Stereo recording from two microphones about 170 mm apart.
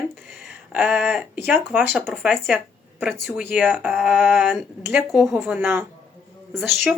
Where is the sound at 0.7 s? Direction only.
10° right (ahead or behind).